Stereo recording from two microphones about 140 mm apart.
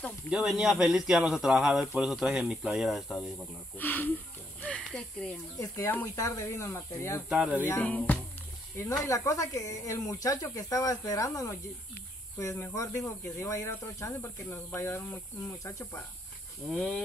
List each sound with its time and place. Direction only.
0.3 s speech: 5° right (ahead or behind)
3.7 s speech: 15° left (ahead or behind)
4.6 s snake: 10° left (ahead or behind)
5.6 s speech: 20° left (ahead or behind)
7.2 s speech: 10° right (ahead or behind)
7.6 s speech: 10° left (ahead or behind)
9.0 s speech: 20° left (ahead or behind)
16.6 s speech: centre (ahead or behind)